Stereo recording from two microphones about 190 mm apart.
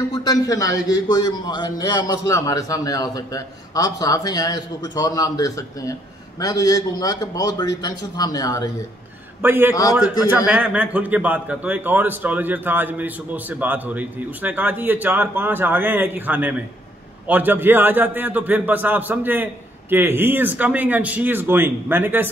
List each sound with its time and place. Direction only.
0.1 s a man's voice: 20° left (ahead or behind)
9.4 s a man's voice: 10° right (ahead or behind)